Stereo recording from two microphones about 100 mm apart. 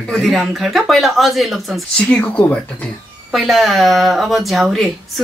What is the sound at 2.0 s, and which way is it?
Speech, 10° left (ahead or behind).